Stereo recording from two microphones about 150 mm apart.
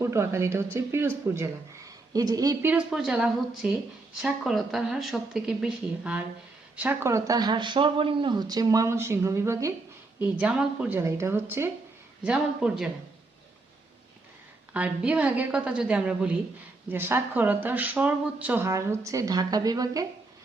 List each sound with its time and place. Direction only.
0.0 s speech: 20° right (ahead or behind)
2.6 s speech: 5° right (ahead or behind)
10.2 s speech: 5° right (ahead or behind)
14.7 s speech: 10° right (ahead or behind)